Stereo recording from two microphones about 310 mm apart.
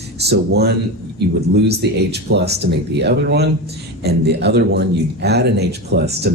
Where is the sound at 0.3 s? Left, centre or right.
Right.